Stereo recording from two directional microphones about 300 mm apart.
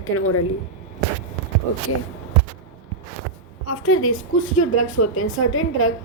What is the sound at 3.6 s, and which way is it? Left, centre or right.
A woman's voice, left.